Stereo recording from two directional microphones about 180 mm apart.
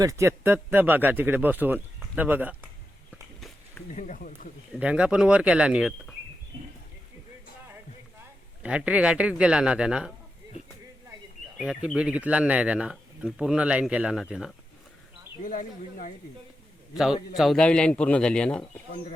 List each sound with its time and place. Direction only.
0.0 s speech: 15° right (ahead or behind)
3.9 s speech: 45° left (ahead or behind)
4.8 s speech: 5° right (ahead or behind)
8.6 s speech: 5° right (ahead or behind)
11.5 s speech: 5° right (ahead or behind)
15.4 s speech: 45° left (ahead or behind)
17.0 s speech: centre (ahead or behind)